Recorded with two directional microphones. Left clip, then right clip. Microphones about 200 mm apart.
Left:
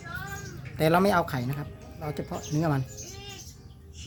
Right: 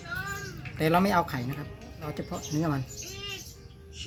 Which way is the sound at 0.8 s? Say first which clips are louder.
Left 2 dB; 45° left (ahead or behind).